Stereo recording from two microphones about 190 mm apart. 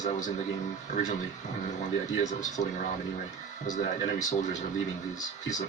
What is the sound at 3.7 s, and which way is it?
Speech, 40° left (ahead or behind).